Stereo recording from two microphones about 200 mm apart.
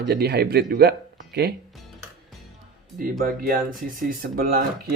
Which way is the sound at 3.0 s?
45° right (ahead or behind).